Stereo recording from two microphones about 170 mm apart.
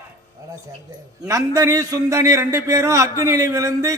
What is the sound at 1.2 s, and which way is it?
A man's voice, 20° right (ahead or behind).